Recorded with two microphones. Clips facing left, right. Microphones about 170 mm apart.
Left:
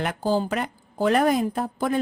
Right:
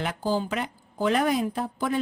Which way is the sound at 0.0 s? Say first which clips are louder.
Left 3 dB; 50° left (ahead or behind).